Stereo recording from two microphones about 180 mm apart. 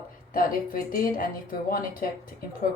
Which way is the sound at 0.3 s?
50° left (ahead or behind).